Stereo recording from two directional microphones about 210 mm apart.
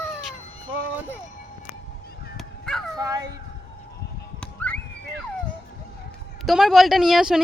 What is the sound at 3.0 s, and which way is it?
Dog, 15° right (ahead or behind).